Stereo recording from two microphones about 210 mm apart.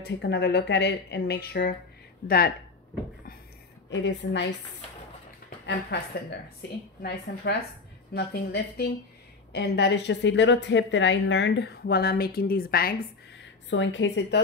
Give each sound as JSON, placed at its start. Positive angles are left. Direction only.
{"t": 0.0, "sound": "speech", "side_deg": 50}
{"t": 3.9, "sound": "a woman's voice", "side_deg": 60}
{"t": 5.7, "sound": "speech", "side_deg": 55}
{"t": 8.1, "sound": "a woman's voice", "side_deg": 50}
{"t": 13.4, "sound": "a woman's voice", "side_deg": 60}